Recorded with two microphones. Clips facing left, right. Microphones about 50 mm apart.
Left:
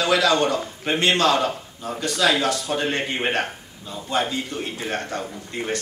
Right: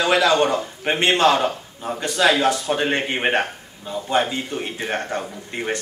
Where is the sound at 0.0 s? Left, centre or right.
Right.